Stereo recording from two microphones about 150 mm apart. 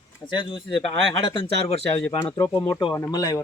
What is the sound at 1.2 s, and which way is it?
Speech, 35° left (ahead or behind).